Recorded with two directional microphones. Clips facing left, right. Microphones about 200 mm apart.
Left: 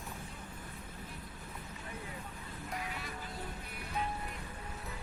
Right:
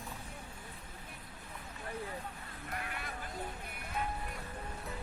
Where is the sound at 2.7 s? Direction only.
55° right (ahead or behind).